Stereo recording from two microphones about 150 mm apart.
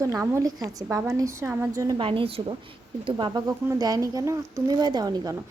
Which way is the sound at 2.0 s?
40° right (ahead or behind).